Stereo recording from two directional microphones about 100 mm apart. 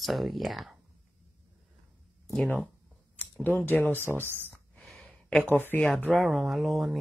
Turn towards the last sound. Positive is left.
turn(degrees=0)  # may be behind; listen again after turning